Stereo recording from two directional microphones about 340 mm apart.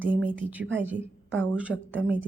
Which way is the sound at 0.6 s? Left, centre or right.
Right.